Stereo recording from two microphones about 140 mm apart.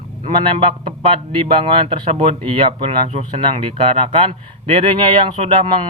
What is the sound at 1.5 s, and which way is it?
Speech, 40° right (ahead or behind).